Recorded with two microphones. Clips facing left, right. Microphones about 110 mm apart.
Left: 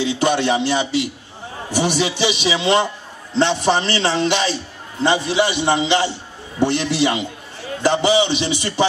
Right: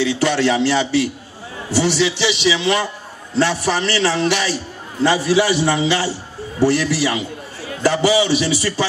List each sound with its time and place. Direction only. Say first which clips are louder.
0.0 s a man's voice: right 1 dB; 20° left (ahead or behind)